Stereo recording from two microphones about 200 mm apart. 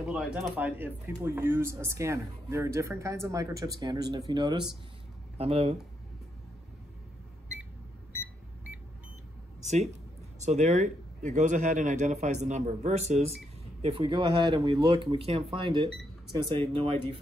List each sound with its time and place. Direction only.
0.0 s speech: 5° right (ahead or behind); by 5.8 s 30° right (ahead or behind)
9.6 s a sound: 35° right (ahead or behind)
10.4 s speech: 35° right (ahead or behind)